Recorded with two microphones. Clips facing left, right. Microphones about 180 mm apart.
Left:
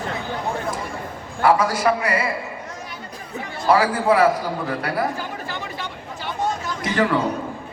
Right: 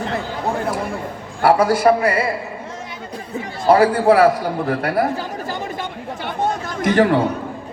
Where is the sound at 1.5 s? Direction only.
60° right (ahead or behind).